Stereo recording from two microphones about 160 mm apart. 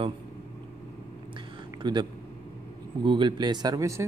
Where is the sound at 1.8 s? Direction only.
30° right (ahead or behind).